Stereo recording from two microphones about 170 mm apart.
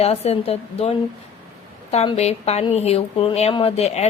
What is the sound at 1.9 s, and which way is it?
Speech, 40° left (ahead or behind).